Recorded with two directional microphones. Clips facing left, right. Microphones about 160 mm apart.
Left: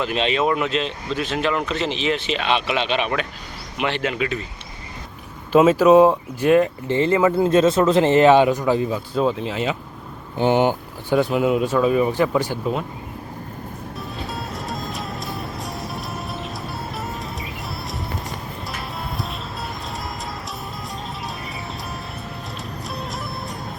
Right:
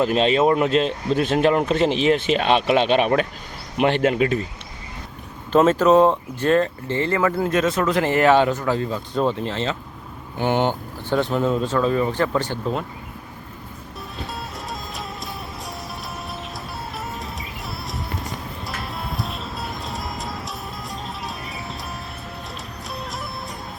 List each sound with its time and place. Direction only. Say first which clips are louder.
0.0 s speech: right 4 dB; 40° right (ahead or behind)
5.5 s speech: left 2 dB; 10° left (ahead or behind)
9.1 s speech: even; centre (ahead or behind)
14.3 s music: left 3 dB; centre (ahead or behind)
22.9 s music: even; centre (ahead or behind)